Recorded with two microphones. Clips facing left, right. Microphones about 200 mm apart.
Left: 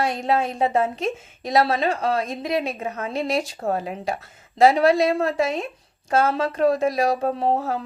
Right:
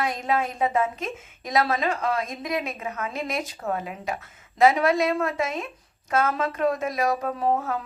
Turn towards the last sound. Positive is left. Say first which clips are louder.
# left 3 dB
turn(degrees=30)  # may be behind; listen again after turning